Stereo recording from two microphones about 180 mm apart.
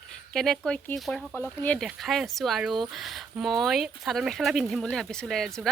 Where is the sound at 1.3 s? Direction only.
10° left (ahead or behind).